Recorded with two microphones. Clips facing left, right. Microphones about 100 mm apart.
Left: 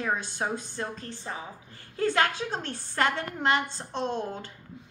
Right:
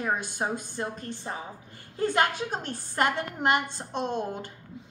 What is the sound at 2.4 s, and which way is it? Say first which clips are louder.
A woman's voice: even; 15° right (ahead or behind).